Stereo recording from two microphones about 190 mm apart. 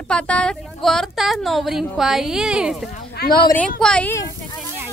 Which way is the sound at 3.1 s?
55° left (ahead or behind).